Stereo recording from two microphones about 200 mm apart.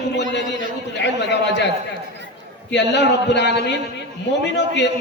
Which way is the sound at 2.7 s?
60° left (ahead or behind).